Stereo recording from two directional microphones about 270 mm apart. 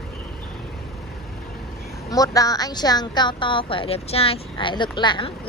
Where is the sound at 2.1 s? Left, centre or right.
Centre.